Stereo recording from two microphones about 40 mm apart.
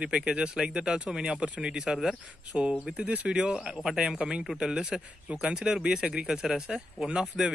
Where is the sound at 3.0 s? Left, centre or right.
Right.